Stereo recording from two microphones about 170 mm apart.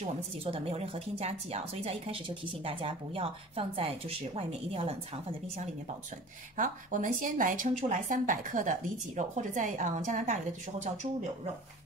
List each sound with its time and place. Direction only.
0.0 s a woman's voice: 35° right (ahead or behind)
6.5 s speech: 50° right (ahead or behind)